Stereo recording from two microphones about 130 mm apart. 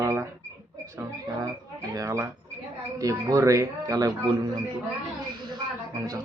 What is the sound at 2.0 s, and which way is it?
Speech, 25° right (ahead or behind).